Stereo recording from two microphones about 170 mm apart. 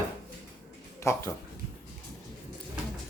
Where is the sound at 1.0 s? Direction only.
15° left (ahead or behind).